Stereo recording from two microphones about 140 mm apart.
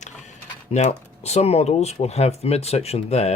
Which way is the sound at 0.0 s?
55° left (ahead or behind).